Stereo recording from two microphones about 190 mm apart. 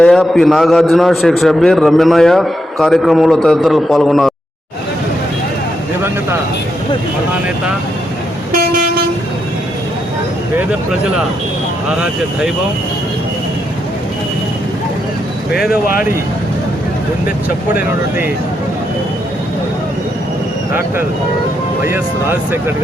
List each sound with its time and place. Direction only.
0.0 s a man's voice: centre (ahead or behind)
11.9 s a man's voice: 5° right (ahead or behind)
15.7 s speech: 50° left (ahead or behind)
21.8 s speech: 10° right (ahead or behind)